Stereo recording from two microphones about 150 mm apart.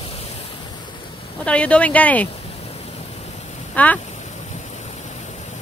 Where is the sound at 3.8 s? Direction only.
10° left (ahead or behind).